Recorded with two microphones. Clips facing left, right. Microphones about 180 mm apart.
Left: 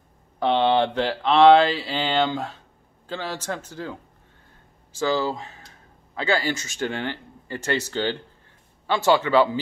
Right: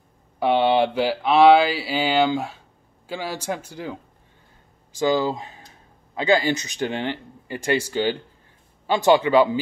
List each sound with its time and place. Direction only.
0.4 s speech: 10° right (ahead or behind)